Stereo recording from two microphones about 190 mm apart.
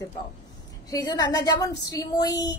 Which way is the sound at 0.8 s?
20° left (ahead or behind).